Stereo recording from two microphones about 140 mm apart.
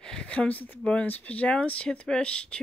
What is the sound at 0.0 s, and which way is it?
Speech, 5° left (ahead or behind).